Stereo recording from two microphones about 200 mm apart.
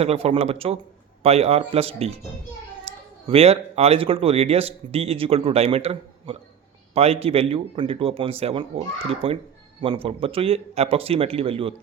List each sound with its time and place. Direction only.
0.0 s speech: 30° right (ahead or behind)
2.9 s a sound: 30° right (ahead or behind)
3.2 s a man's voice: 30° right (ahead or behind)